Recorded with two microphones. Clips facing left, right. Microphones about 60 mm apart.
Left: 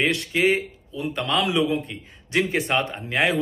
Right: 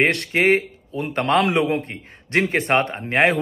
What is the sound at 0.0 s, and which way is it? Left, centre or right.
A man's voice, right.